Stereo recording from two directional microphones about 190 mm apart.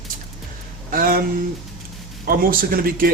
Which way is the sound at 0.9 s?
50° right (ahead or behind).